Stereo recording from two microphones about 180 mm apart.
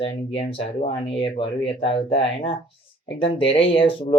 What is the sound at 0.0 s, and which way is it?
Speech, 35° left (ahead or behind).